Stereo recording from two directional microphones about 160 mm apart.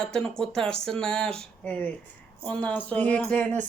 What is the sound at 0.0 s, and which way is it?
Speech, 5° left (ahead or behind).